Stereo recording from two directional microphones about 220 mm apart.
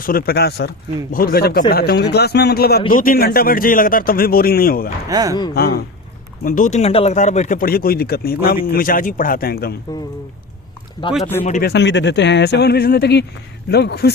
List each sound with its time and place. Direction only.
0.0 s speech: 40° left (ahead or behind)
5.0 s speech: 15° right (ahead or behind)
5.5 s speech: 45° left (ahead or behind)
11.4 s speech: 35° left (ahead or behind)
11.7 s speech: 50° left (ahead or behind)